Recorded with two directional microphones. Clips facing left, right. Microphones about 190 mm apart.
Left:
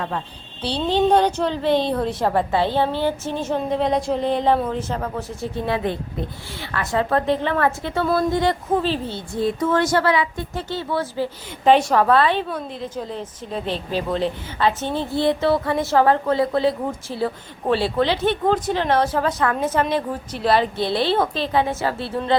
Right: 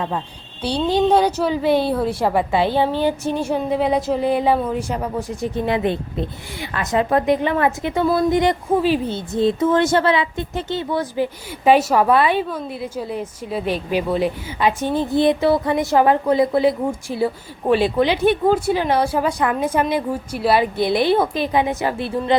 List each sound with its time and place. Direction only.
0.6 s a woman's voice: 10° right (ahead or behind)